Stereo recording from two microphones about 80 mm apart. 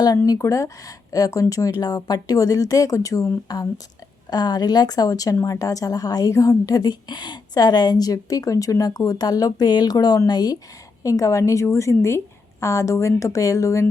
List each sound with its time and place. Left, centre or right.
0.3 s speech: left
4.3 s speech: left
11.0 s a woman's voice: left